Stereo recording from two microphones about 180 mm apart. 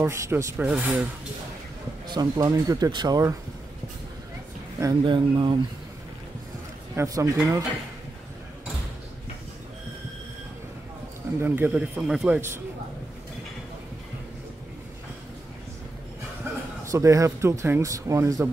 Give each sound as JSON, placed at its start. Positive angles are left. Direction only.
{"t": 0.0, "sound": "speech", "side_deg": -15}
{"t": 2.1, "sound": "speech", "side_deg": -20}
{"t": 4.7, "sound": "speech", "side_deg": -20}
{"t": 7.0, "sound": "speech", "side_deg": -15}
{"t": 11.4, "sound": "speech", "side_deg": -10}
{"t": 16.5, "sound": "chuckle", "side_deg": -15}
{"t": 16.8, "sound": "speech", "side_deg": -15}